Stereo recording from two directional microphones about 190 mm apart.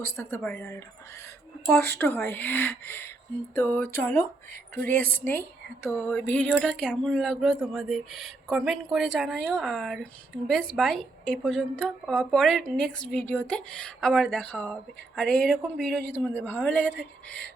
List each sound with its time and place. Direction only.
0.0 s a woman's voice: 10° left (ahead or behind)
1.7 s a woman's voice: 60° right (ahead or behind)
2.0 s a woman's voice: 10° left (ahead or behind)